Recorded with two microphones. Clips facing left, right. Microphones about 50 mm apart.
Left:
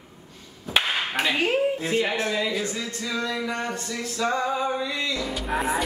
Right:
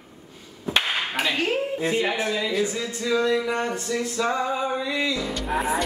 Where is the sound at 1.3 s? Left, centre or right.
Centre.